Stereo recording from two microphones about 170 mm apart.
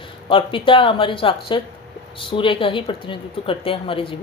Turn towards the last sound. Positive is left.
turn(degrees=30)  # may be behind; listen again after turning